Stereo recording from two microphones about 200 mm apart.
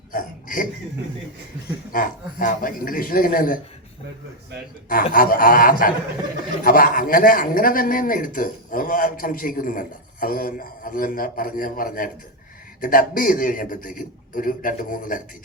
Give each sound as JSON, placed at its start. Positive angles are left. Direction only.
{"t": 0.1, "sound": "a sound", "side_deg": 45}
{"t": 1.9, "sound": "a man's voice", "side_deg": 45}
{"t": 5.1, "sound": "a man's voice", "side_deg": 45}